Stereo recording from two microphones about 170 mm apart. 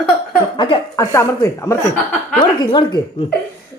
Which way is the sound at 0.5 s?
25° left (ahead or behind).